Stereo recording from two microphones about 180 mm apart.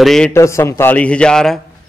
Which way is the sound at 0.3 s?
15° left (ahead or behind).